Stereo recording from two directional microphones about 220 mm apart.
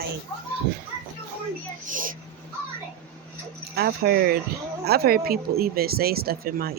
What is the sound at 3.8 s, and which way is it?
Speech, 45° right (ahead or behind).